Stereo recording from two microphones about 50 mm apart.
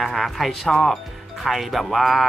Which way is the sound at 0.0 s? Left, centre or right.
Centre.